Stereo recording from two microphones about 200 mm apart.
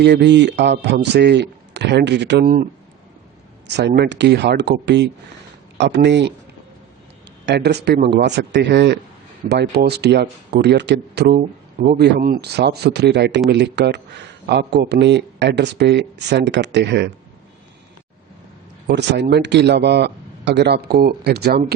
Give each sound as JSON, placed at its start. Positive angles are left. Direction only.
{"t": 0.0, "sound": "speech", "side_deg": -55}
{"t": 3.8, "sound": "speech", "side_deg": -55}
{"t": 7.4, "sound": "speech", "side_deg": -55}
{"t": 18.9, "sound": "speech", "side_deg": -55}